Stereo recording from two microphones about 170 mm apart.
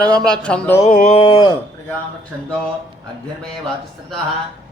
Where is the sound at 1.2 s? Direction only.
30° left (ahead or behind).